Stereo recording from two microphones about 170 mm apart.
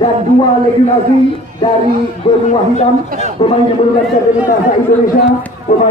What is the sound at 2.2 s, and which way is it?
Speech, 40° left (ahead or behind).